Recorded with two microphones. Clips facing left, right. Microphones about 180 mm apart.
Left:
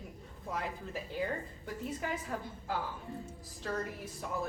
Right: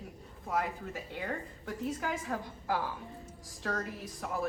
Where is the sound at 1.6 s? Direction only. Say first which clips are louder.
Right 3 dB; 75° right (ahead or behind).